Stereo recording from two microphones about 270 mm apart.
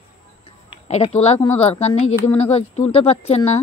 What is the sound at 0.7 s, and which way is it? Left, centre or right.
Speech, left.